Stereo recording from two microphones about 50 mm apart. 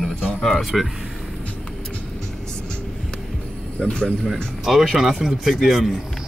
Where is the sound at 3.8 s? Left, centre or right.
Centre.